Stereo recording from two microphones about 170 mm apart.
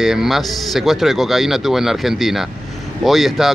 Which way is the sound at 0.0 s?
Centre (ahead or behind).